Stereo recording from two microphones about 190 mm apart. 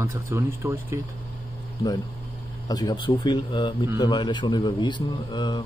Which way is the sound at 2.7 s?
20° left (ahead or behind).